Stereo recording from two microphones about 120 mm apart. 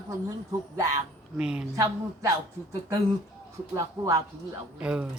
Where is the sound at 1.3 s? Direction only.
5° right (ahead or behind).